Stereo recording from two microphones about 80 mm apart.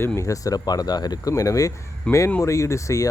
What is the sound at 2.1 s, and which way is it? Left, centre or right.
Speech, centre.